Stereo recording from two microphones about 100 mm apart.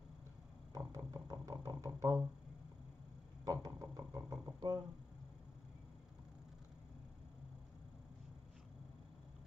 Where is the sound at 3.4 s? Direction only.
35° right (ahead or behind).